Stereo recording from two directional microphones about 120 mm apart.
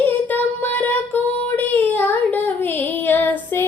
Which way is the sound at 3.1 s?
15° left (ahead or behind).